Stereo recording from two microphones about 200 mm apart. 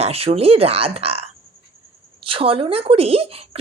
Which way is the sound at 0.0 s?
30° right (ahead or behind).